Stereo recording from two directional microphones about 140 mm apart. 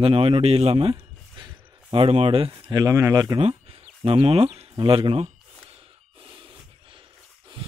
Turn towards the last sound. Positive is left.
turn(degrees=-35)  # may be behind; listen again after turning